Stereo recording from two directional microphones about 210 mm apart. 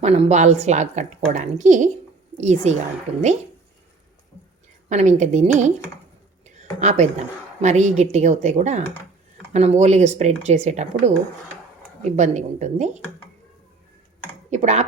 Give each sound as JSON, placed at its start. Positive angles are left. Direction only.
{"t": 0.0, "sound": "a woman's voice", "side_deg": -30}
{"t": 4.9, "sound": "a woman's voice", "side_deg": -35}
{"t": 6.4, "sound": "a sound", "side_deg": -35}
{"t": 7.6, "sound": "a woman's voice", "side_deg": -35}
{"t": 12.1, "sound": "a woman's voice", "side_deg": -35}
{"t": 14.5, "sound": "a woman's voice", "side_deg": -35}